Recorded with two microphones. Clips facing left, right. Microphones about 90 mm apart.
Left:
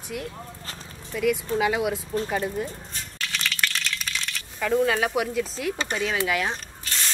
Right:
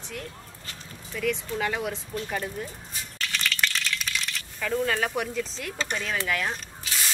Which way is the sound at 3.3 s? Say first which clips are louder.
Even; 5° left (ahead or behind).